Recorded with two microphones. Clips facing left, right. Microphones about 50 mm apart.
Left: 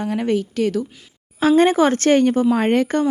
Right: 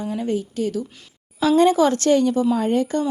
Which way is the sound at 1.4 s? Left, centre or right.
Left.